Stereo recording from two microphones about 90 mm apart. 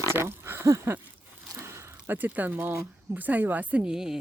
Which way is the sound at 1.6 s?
30° right (ahead or behind).